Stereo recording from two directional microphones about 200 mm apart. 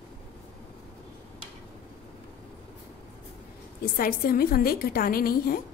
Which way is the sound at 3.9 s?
50° left (ahead or behind).